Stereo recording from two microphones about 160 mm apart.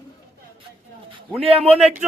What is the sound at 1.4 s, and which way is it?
Speech, 40° right (ahead or behind).